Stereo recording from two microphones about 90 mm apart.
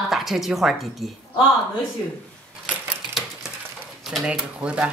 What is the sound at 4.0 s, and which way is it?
Speech, 5° right (ahead or behind).